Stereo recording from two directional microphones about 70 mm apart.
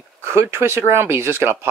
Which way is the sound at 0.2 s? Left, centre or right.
Right.